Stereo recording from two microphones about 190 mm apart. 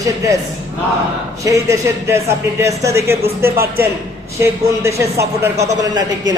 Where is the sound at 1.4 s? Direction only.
15° right (ahead or behind).